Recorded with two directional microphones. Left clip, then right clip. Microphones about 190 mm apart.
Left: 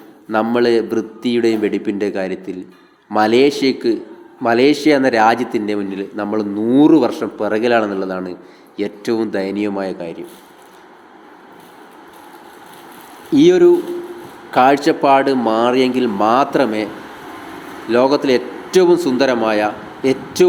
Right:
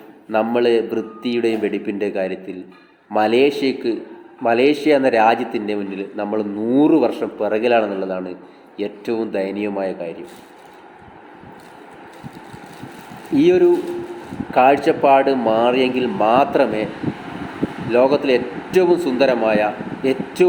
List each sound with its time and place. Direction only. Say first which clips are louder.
0.3 s a man's voice: left 1 dB; 30° left (ahead or behind)
13.3 s a man's voice: left 4 dB; 30° left (ahead or behind)
17.9 s a man's voice: left 1 dB; 30° left (ahead or behind)